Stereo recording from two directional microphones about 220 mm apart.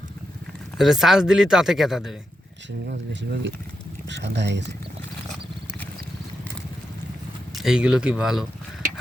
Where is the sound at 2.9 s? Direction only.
50° right (ahead or behind).